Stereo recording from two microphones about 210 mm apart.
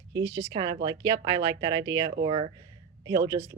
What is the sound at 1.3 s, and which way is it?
Speech, 60° right (ahead or behind).